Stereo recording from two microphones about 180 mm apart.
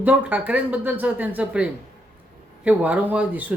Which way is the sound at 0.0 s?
10° right (ahead or behind).